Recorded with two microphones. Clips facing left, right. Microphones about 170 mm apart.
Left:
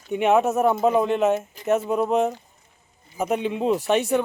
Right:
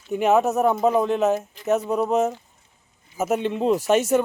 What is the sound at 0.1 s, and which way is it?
Speech, centre (ahead or behind).